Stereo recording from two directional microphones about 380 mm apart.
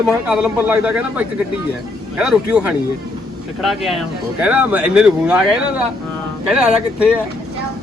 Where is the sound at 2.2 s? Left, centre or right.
Centre.